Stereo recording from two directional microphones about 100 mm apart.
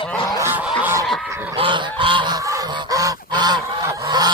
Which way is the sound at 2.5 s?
35° right (ahead or behind).